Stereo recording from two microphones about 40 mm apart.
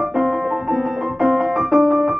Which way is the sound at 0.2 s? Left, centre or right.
Centre.